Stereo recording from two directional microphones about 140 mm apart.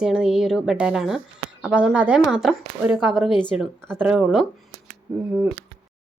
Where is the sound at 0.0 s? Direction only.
5° right (ahead or behind).